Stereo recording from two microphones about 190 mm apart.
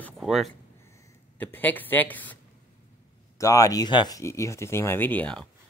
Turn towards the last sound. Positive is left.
turn(degrees=10)  # may be behind; listen again after turning